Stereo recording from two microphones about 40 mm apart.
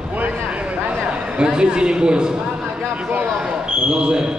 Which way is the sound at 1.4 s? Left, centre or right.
Right.